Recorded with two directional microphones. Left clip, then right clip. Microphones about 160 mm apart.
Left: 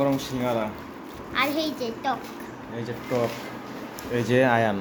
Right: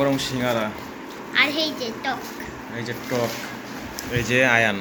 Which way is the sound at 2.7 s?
10° left (ahead or behind).